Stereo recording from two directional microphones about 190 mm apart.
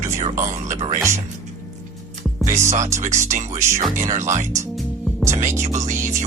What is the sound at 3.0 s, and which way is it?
Speech, 40° right (ahead or behind).